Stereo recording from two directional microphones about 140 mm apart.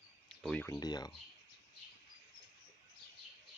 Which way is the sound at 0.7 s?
30° left (ahead or behind).